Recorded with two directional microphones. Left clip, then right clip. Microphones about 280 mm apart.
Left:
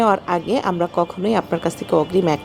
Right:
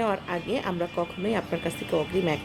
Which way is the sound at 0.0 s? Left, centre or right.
Left.